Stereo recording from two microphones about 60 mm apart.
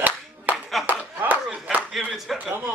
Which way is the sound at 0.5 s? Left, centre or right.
Right.